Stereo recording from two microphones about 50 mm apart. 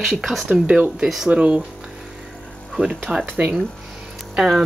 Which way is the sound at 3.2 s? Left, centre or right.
Right.